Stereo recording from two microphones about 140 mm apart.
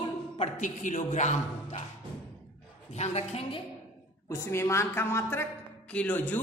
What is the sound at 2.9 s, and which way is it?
Speech, 50° left (ahead or behind).